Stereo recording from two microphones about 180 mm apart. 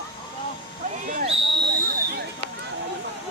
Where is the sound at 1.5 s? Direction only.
65° right (ahead or behind).